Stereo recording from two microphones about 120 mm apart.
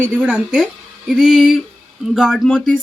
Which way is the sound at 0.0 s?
10° right (ahead or behind).